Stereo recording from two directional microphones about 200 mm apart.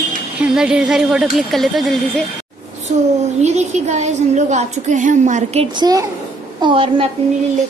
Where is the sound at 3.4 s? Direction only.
35° right (ahead or behind).